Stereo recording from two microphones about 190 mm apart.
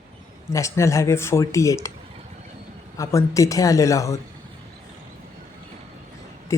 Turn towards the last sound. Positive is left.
turn(degrees=15)  # may be behind; listen again after turning